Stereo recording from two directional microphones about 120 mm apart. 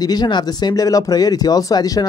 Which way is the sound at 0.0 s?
35° left (ahead or behind).